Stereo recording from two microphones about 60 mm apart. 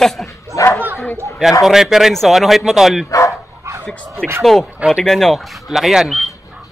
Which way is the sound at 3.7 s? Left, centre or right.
Right.